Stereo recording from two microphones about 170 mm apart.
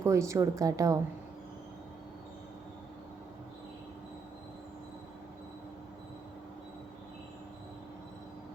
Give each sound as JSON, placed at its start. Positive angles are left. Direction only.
{"t": 0.0, "sound": "a woman's voice", "side_deg": -15}